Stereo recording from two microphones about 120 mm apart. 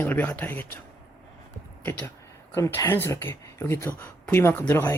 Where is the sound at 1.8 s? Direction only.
15° left (ahead or behind).